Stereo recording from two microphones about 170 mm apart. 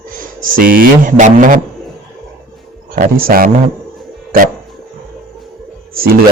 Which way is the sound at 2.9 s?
55° right (ahead or behind).